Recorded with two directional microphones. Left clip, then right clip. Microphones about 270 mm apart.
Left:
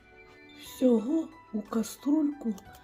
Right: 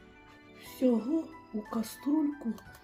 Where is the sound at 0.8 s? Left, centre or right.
Centre.